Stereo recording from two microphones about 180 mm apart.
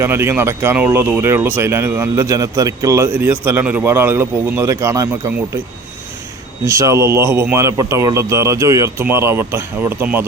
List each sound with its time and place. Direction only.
0.0 s speech: 15° right (ahead or behind)
6.7 s speech: 15° right (ahead or behind)